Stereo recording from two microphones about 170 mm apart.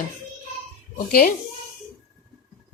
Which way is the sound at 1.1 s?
60° left (ahead or behind).